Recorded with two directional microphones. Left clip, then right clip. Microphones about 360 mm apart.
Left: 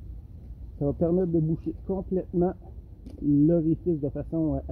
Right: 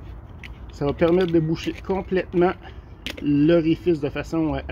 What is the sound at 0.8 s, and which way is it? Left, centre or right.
Speech, centre.